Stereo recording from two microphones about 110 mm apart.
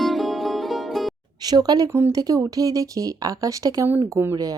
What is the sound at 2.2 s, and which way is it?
Speech, 35° right (ahead or behind).